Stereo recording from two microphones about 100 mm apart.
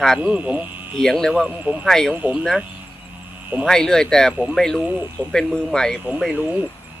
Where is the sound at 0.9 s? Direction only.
5° left (ahead or behind).